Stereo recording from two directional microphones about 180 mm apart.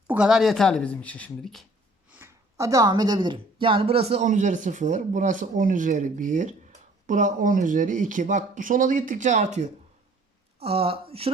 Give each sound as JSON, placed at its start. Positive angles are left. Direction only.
{"t": 0.1, "sound": "speech", "side_deg": -5}
{"t": 2.1, "sound": "speech", "side_deg": -15}